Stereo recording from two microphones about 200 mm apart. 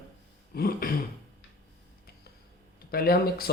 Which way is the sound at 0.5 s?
50° left (ahead or behind).